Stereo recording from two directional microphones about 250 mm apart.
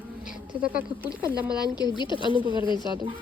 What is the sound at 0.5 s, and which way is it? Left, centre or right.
Speech, centre.